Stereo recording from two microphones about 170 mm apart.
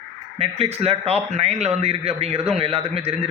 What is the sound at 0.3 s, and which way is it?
Speech, 35° right (ahead or behind).